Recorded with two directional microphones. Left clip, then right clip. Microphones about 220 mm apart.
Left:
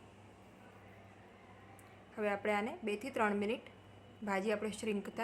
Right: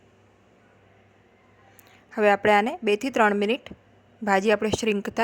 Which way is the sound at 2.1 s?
40° right (ahead or behind).